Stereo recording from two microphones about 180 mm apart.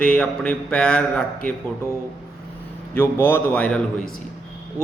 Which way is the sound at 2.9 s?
10° left (ahead or behind).